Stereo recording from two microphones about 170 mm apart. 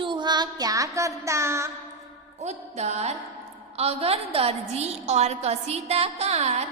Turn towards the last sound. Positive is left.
turn(degrees=-40)  # may be behind; listen again after turning